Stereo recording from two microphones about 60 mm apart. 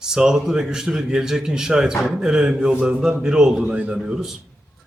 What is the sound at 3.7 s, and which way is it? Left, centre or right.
Speech, centre.